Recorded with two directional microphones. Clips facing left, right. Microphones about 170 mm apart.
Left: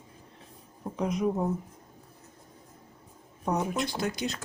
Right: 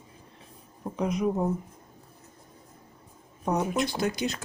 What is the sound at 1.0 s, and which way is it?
Speech, centre (ahead or behind).